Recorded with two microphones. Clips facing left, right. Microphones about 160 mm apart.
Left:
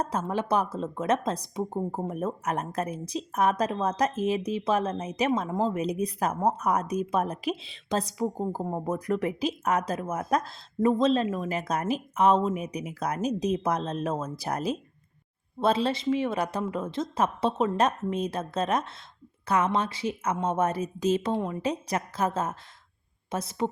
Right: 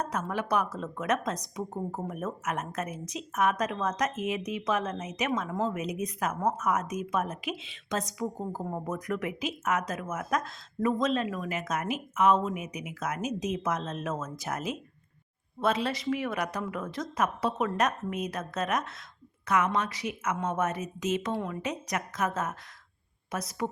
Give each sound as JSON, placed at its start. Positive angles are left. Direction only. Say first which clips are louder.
{"t": 0.0, "sound": "a woman's voice", "louder": "left 3 dB", "side_deg": 30}